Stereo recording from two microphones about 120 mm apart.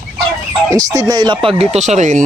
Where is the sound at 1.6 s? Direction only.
65° right (ahead or behind); by 2.2 s 85° right.